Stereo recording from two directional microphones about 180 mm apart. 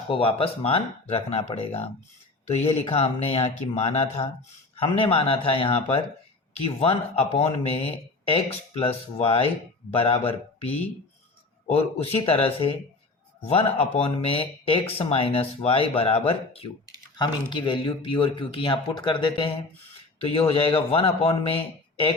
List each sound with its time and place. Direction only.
0.1 s speech: 30° left (ahead or behind)